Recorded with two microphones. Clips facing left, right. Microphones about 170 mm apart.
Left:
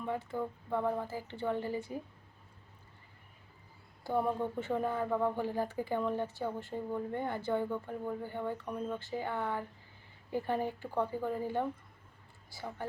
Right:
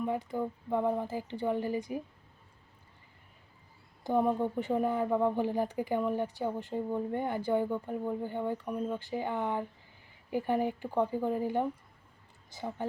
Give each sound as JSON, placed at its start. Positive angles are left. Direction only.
{"t": 0.0, "sound": "speech", "side_deg": -15}
{"t": 4.0, "sound": "speech", "side_deg": -15}